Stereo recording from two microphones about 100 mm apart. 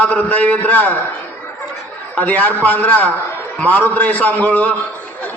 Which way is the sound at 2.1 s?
15° left (ahead or behind).